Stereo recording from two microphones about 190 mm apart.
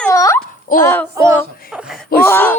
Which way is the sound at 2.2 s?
10° left (ahead or behind).